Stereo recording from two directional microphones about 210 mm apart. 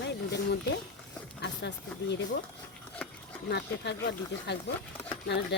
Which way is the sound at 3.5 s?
55° left (ahead or behind).